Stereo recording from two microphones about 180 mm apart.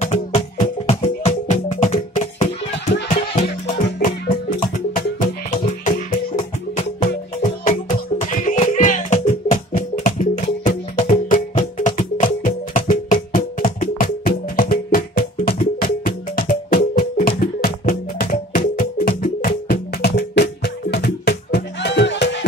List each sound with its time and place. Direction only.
0.0 s music: 40° left (ahead or behind)
4.0 s music: 50° left (ahead or behind)
8.3 s music: 45° left (ahead or behind); by 22.4 s 80° left